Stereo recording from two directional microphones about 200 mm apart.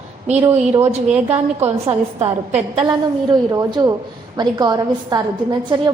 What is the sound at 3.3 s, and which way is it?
A woman's voice, 20° right (ahead or behind).